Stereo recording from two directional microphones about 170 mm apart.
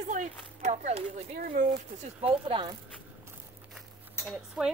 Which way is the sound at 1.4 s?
55° right (ahead or behind).